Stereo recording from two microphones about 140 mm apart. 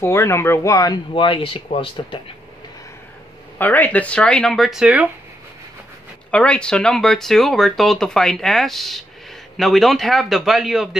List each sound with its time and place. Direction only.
0.0 s speech: 20° left (ahead or behind); by 2.1 s 40° left (ahead or behind)
3.5 s speech: 10° left (ahead or behind); by 5.0 s 5° right (ahead or behind)
6.3 s speech: 5° left (ahead or behind)